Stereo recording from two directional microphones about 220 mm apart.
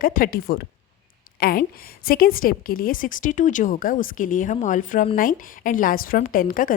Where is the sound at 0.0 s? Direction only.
40° left (ahead or behind).